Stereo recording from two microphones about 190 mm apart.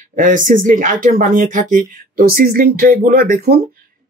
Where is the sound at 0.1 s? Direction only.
45° right (ahead or behind).